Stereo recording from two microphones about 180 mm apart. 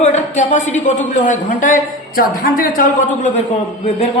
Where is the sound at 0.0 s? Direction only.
40° left (ahead or behind).